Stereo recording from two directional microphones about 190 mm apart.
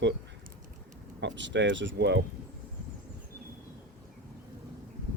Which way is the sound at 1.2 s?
70° right (ahead or behind).